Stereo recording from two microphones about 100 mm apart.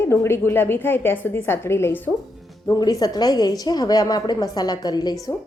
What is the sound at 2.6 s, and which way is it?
A woman's voice, 40° left (ahead or behind).